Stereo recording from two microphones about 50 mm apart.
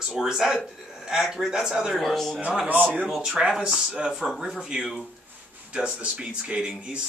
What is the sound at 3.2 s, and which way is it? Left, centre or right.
Speech, centre.